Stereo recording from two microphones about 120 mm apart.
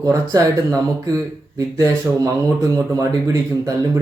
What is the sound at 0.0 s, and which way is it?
Speech, 30° right (ahead or behind).